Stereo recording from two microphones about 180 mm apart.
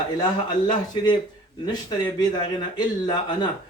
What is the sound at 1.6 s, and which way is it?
A man's voice, 25° left (ahead or behind).